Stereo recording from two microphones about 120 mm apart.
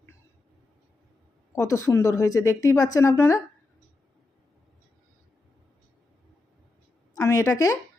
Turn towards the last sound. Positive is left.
turn(degrees=25)  # may be behind; listen again after turning